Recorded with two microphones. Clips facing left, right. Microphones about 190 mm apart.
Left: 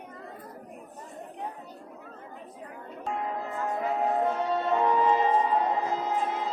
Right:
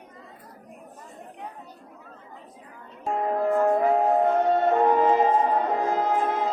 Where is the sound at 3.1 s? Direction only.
50° right (ahead or behind).